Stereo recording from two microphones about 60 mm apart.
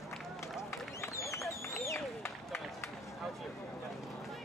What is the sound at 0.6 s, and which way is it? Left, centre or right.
Run, left.